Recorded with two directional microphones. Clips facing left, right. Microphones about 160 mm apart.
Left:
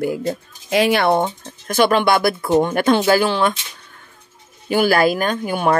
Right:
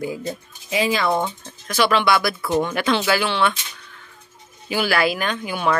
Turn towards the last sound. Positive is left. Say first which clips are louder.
# left 4 dB
turn(degrees=45)  # may be behind; listen again after turning